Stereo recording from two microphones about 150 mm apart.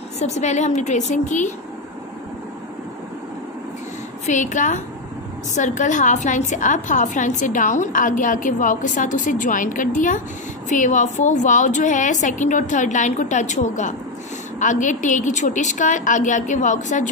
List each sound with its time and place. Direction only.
0.2 s a woman's voice: 50° left (ahead or behind)
4.3 s a woman's voice: 55° left (ahead or behind)